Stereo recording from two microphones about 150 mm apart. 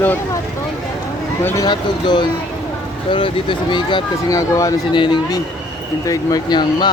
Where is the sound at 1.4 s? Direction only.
15° left (ahead or behind).